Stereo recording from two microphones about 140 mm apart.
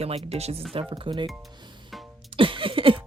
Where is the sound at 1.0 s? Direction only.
35° right (ahead or behind).